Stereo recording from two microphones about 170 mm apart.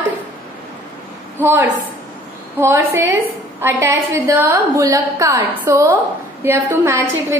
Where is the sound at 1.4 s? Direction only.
10° right (ahead or behind).